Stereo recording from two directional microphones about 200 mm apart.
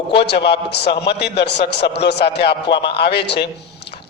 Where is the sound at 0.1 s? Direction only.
55° left (ahead or behind).